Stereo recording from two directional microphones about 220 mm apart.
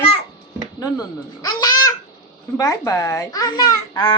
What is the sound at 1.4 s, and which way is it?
A woman's voice, 15° left (ahead or behind).